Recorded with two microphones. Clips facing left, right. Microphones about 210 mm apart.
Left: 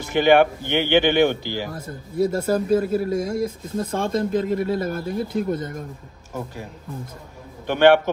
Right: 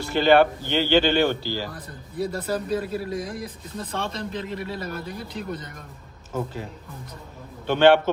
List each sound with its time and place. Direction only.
0.1 s speech: 15° left (ahead or behind)
2.1 s speech: 45° left (ahead or behind)
6.3 s speech: 10° left (ahead or behind)